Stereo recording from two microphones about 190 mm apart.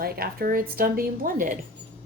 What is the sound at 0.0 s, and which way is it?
Speech, 50° right (ahead or behind).